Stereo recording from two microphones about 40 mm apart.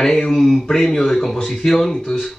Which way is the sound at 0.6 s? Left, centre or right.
Centre.